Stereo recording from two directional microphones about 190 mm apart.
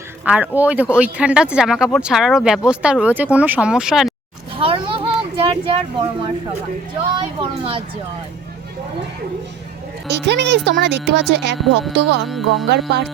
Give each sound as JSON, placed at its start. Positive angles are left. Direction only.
{"t": 0.3, "sound": "speech", "side_deg": -10}
{"t": 4.5, "sound": "a sound", "side_deg": -30}
{"t": 7.2, "sound": "speech", "side_deg": -25}
{"t": 10.1, "sound": "speech", "side_deg": -65}
{"t": 12.2, "sound": "speech", "side_deg": 0}
{"t": 12.7, "sound": "speech", "side_deg": -60}